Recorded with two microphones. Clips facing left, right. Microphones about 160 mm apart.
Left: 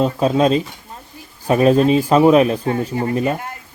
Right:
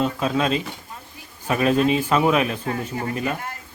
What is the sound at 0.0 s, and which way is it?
A man's voice, 35° left (ahead or behind).